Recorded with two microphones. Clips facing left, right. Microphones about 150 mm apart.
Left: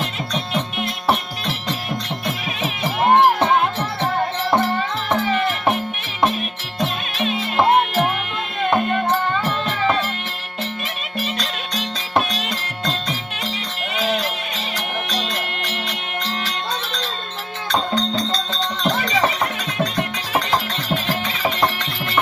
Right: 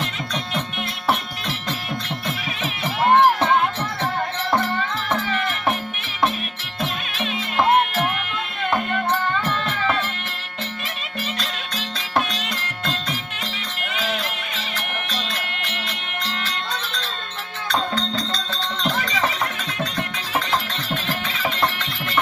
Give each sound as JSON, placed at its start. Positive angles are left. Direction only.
{"t": 2.2, "sound": "music", "side_deg": 15}
{"t": 6.7, "sound": "music", "side_deg": 20}
{"t": 14.8, "sound": "music", "side_deg": 15}
{"t": 17.7, "sound": "music", "side_deg": 20}
{"t": 18.8, "sound": "a sound", "side_deg": 20}
{"t": 20.9, "sound": "music", "side_deg": 20}